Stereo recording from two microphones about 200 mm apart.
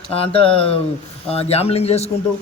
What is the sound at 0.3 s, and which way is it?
A man's voice, 30° left (ahead or behind).